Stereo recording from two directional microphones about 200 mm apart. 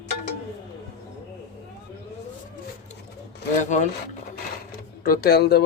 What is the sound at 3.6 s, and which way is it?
Speech, 35° left (ahead or behind).